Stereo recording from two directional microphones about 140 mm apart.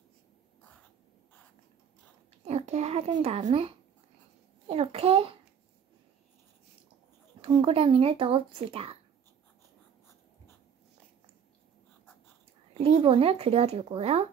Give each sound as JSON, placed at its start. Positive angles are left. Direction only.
{"t": 2.4, "sound": "a sound", "side_deg": -55}
{"t": 3.2, "sound": "speech", "side_deg": -50}
{"t": 7.4, "sound": "speech", "side_deg": -40}
{"t": 12.7, "sound": "speech", "side_deg": -50}